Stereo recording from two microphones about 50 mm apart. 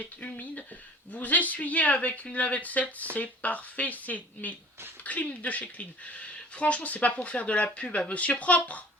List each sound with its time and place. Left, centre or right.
0.0 s speech: left